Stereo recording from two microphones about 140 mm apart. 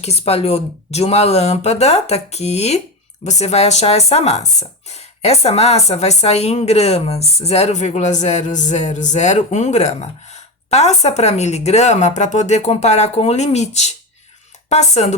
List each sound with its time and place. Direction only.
0.0 s speech: 50° left (ahead or behind)